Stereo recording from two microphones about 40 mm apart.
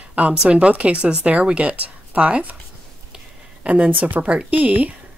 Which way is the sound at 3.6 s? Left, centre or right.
Right.